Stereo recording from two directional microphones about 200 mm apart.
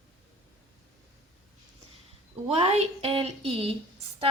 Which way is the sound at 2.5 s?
30° right (ahead or behind).